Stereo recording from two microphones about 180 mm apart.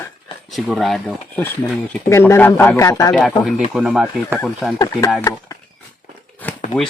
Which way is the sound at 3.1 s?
Centre (ahead or behind).